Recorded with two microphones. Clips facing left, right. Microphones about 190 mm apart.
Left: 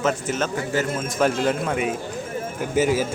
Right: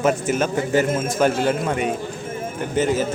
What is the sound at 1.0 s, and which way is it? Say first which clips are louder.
Speech: right 2 dB; centre (ahead or behind).